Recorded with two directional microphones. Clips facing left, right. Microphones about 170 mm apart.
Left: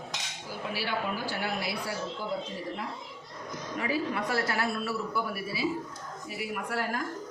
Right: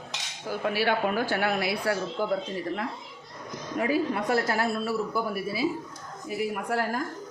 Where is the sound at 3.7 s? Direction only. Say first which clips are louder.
Right 5 dB; 50° right (ahead or behind).